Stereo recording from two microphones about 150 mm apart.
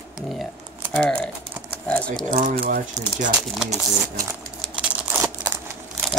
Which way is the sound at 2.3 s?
65° right (ahead or behind).